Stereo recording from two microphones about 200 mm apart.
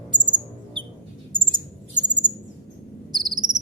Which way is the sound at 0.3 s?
25° right (ahead or behind).